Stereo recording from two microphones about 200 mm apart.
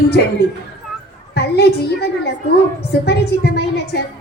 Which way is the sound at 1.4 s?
55° left (ahead or behind).